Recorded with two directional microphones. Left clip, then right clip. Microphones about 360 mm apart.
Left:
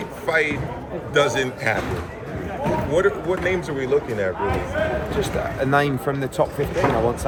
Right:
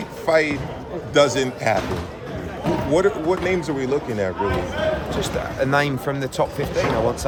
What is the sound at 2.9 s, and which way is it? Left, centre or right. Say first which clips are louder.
Speech: right 2 dB; centre.